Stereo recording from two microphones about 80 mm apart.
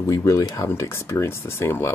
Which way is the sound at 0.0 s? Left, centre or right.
Left.